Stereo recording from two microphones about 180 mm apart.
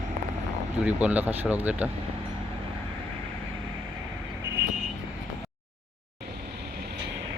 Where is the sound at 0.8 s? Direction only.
5° right (ahead or behind).